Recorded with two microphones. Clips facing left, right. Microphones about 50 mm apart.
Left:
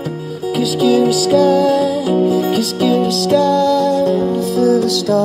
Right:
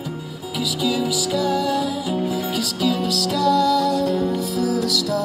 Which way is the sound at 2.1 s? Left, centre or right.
Left.